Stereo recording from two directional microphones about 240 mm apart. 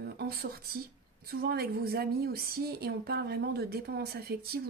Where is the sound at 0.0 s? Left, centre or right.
Right.